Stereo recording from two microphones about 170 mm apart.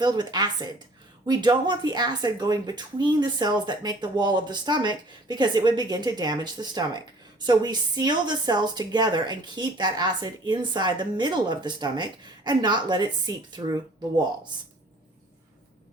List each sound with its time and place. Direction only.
0.0 s speech: 25° right (ahead or behind)